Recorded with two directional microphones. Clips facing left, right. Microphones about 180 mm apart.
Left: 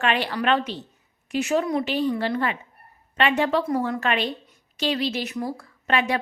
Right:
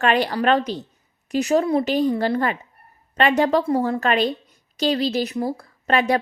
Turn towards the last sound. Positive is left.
turn(degrees=-40)  # may be behind; listen again after turning